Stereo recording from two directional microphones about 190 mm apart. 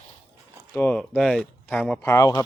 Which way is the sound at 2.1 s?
15° left (ahead or behind).